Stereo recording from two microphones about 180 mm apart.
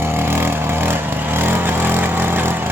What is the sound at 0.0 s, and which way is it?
Vehicle, 10° right (ahead or behind).